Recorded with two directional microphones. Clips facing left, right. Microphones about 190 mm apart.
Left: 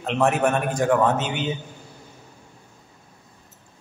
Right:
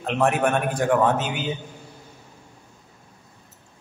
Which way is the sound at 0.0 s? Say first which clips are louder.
Left 1 dB; centre (ahead or behind).